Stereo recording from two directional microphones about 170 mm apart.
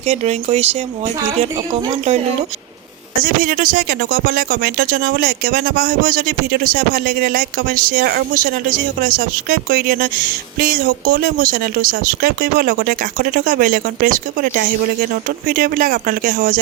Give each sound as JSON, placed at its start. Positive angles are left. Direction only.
{"t": 0.0, "sound": "speech", "side_deg": -40}
{"t": 3.2, "sound": "speech", "side_deg": -55}